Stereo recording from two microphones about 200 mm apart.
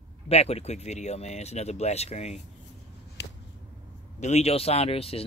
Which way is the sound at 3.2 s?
55° left (ahead or behind).